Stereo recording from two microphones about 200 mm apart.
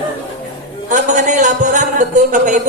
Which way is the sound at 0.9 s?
40° right (ahead or behind).